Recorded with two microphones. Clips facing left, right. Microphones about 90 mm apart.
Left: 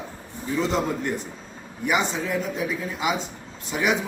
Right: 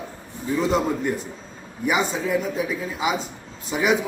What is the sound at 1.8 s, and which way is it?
A man's voice, 5° right (ahead or behind).